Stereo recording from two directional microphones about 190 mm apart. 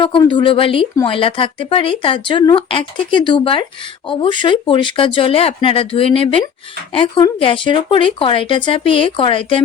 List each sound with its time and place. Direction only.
0.0 s speech: 25° left (ahead or behind)